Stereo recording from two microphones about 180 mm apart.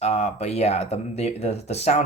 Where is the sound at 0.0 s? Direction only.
35° left (ahead or behind).